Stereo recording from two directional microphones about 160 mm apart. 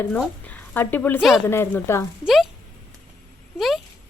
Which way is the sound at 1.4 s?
15° left (ahead or behind).